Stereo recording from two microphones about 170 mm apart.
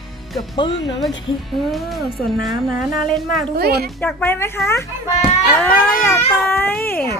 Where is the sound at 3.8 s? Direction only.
10° left (ahead or behind).